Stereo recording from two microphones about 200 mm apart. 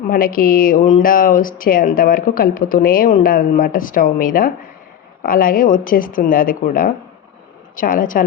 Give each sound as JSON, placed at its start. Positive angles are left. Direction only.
{"t": 0.1, "sound": "speech", "side_deg": 45}